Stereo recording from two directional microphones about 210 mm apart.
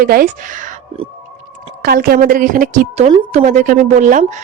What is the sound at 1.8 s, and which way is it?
Speech, 45° right (ahead or behind).